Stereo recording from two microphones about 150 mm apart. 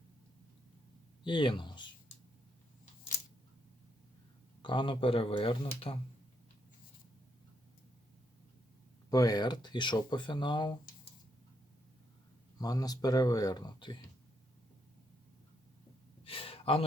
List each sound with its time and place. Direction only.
1.2 s speech: 30° left (ahead or behind)
4.6 s speech: 30° left (ahead or behind)
9.0 s speech: 25° left (ahead or behind)
12.5 s speech: 25° left (ahead or behind)
16.2 s gasp: 40° left (ahead or behind)